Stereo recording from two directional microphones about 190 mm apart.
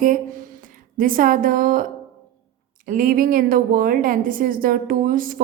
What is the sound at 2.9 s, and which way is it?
A woman's voice, 45° right (ahead or behind).